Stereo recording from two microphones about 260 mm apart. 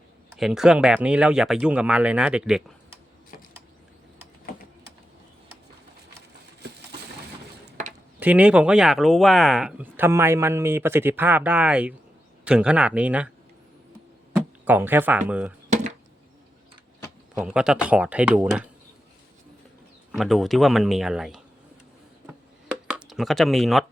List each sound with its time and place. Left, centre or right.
0.3 s speech: centre
6.6 s a sound: right
8.2 s speech: centre
14.3 s a sound: centre
15.3 s speech: centre
17.4 s speech: centre
20.1 s speech: centre
22.9 s speech: centre